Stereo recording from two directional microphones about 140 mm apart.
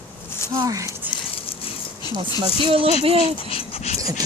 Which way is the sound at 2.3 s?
40° right (ahead or behind).